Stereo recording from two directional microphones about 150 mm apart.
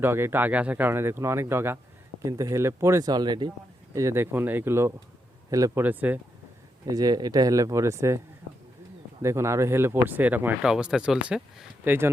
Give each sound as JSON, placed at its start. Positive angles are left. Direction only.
{"t": 0.0, "sound": "speech", "side_deg": -15}
{"t": 3.9, "sound": "speech", "side_deg": -20}
{"t": 5.8, "sound": "speech", "side_deg": -10}
{"t": 6.8, "sound": "speech", "side_deg": -25}
{"t": 9.2, "sound": "speech", "side_deg": -20}